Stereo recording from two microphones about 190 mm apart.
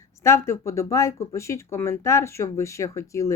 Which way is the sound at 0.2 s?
15° left (ahead or behind).